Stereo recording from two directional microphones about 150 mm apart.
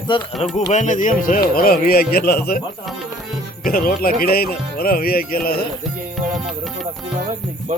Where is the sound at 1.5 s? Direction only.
80° left.